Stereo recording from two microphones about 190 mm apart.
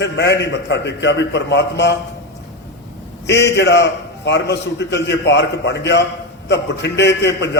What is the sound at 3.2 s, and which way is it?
A man's voice, 65° left (ahead or behind).